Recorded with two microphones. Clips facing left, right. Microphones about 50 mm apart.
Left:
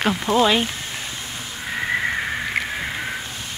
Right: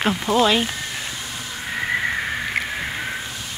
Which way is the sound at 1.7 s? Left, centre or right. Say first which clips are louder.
Even; centre.